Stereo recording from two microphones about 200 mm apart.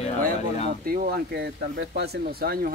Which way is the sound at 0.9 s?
50° right (ahead or behind).